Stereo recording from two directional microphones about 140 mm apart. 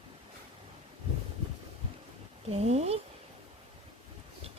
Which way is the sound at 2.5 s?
50° right (ahead or behind).